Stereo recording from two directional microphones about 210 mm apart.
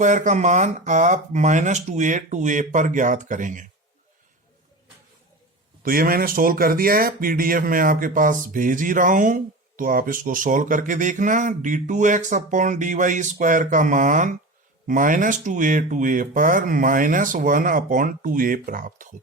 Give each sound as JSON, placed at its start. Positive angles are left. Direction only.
{"t": 0.0, "sound": "speech", "side_deg": -35}
{"t": 5.8, "sound": "speech", "side_deg": -45}